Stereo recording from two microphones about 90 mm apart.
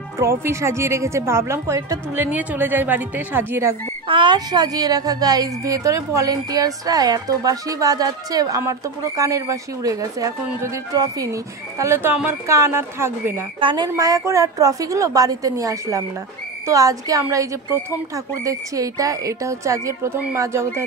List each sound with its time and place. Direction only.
0.2 s a woman's voice: 30° right (ahead or behind)
4.1 s a woman's voice: 60° right (ahead or behind); by 11.2 s 40° right (ahead or behind)
11.8 s a woman's voice: 25° right (ahead or behind)
13.6 s speech: 70° right (ahead or behind)
13.9 s speech: 40° right (ahead or behind)